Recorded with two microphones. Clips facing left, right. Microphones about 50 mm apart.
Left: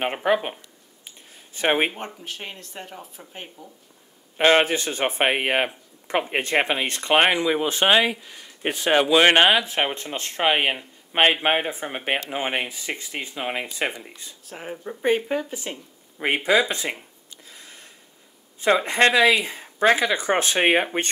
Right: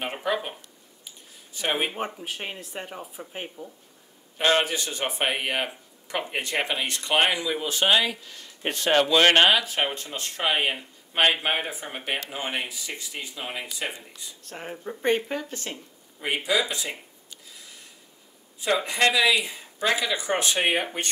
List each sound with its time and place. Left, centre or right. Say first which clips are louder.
0.0 s speech: left 6 dB; left
1.0 s a sound: left 2 dB; left
2.0 s speech: right 3 dB; centre
4.4 s speech: left 5 dB; left
9.9 s speech: left 5 dB; left
14.4 s speech: left 2 dB; centre
16.4 s speech: left 6 dB; left
17.5 s a sound: left 4 dB; left
18.6 s speech: left 5 dB; left